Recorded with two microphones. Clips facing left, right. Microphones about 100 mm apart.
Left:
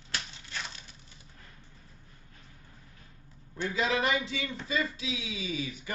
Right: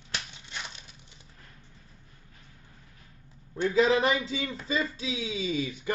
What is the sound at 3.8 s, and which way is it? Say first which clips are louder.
A man's voice: right 5 dB; 35° right (ahead or behind).